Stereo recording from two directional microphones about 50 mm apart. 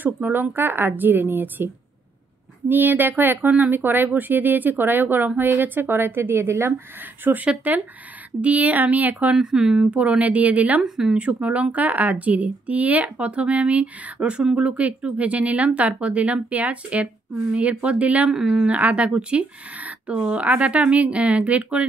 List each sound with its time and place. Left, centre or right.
0.0 s speech: right
2.7 s a woman's voice: right
7.4 s speech: right
9.4 s speech: centre
9.8 s speech: right
10.8 s speech: centre
11.3 s speech: right
18.3 s speech: centre
18.7 s speech: right